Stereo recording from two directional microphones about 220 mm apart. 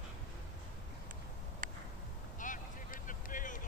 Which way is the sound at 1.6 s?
40° right (ahead or behind).